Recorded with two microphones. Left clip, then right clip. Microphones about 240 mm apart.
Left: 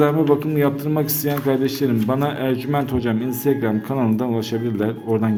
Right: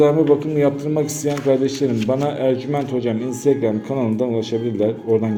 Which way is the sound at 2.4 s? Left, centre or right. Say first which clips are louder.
Right 3 dB; left.